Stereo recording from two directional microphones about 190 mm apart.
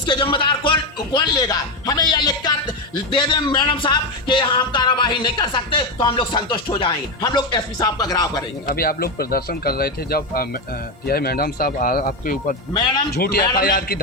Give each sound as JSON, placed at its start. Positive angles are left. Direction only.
{"t": 0.0, "sound": "speech", "side_deg": 25}
{"t": 8.7, "sound": "speech", "side_deg": 50}